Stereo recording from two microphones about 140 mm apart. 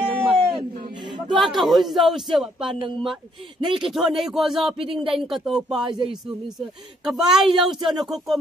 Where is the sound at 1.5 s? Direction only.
Centre (ahead or behind).